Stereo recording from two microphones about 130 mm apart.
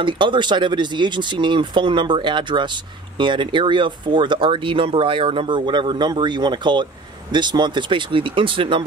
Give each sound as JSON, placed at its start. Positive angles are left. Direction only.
{"t": 0.0, "sound": "speech", "side_deg": -40}